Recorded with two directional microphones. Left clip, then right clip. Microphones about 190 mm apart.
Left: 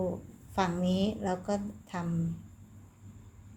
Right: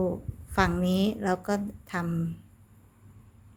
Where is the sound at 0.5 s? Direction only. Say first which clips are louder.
Right 4 dB; 30° right (ahead or behind).